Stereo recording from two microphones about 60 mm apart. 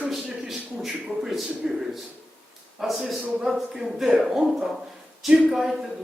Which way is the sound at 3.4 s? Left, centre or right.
Centre.